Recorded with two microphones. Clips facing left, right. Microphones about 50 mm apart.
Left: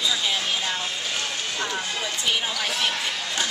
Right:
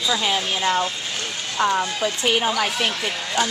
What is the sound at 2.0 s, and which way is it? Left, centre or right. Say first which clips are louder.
Speech: right 5 dB; right.